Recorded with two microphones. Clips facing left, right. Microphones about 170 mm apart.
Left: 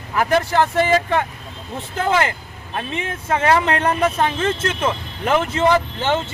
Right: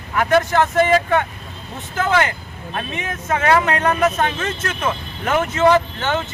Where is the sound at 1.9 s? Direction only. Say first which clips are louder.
Right 1 dB; 30° left (ahead or behind).